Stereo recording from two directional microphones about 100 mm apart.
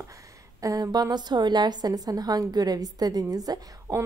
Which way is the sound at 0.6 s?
35° right (ahead or behind).